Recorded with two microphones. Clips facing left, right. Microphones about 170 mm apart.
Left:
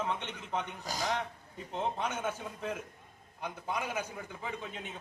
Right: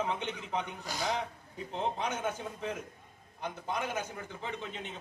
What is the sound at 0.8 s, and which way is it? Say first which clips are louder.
Speech: even; 40° left (ahead or behind).